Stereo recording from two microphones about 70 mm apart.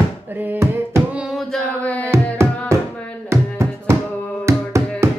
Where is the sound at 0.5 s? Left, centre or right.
Right.